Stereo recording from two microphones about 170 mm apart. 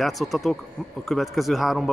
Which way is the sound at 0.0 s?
Centre (ahead or behind).